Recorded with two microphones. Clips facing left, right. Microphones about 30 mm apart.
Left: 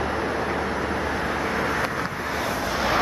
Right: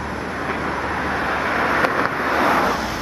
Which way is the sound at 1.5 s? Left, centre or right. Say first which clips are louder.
Right 6 dB; right.